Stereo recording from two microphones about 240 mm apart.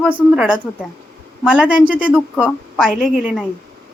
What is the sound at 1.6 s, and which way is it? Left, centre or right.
A woman's voice, centre.